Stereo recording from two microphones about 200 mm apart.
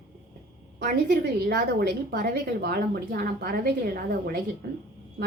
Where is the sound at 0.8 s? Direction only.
50° right (ahead or behind).